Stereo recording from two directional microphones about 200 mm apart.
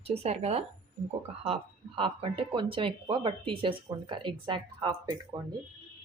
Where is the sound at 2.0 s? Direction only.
25° right (ahead or behind).